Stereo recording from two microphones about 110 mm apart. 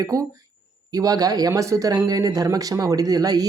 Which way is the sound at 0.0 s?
30° right (ahead or behind).